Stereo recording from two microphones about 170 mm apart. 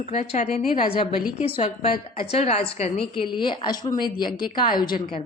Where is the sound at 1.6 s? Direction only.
35° left (ahead or behind).